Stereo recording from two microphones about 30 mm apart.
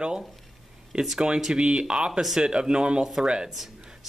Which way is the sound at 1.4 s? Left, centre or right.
Right.